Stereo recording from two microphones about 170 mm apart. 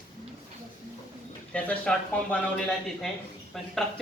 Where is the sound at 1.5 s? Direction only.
5° left (ahead or behind).